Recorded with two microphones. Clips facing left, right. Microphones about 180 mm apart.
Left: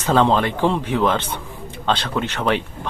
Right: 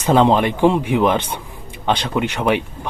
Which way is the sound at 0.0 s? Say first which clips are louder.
Right 3 dB; 15° right (ahead or behind).